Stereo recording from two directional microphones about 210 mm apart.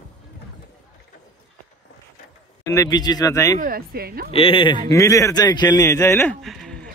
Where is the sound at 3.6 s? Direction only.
45° right (ahead or behind).